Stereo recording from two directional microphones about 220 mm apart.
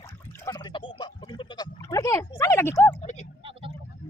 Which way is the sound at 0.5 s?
20° left (ahead or behind).